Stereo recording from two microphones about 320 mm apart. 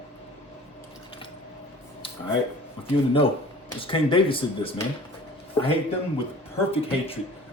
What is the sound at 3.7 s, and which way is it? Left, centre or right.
Speech, centre.